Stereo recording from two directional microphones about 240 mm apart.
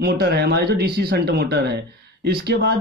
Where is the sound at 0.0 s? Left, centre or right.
Right.